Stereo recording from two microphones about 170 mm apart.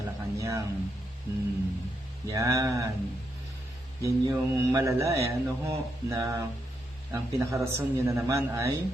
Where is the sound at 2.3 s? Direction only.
20° right (ahead or behind).